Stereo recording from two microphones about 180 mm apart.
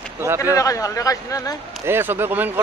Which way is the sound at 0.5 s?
20° left (ahead or behind).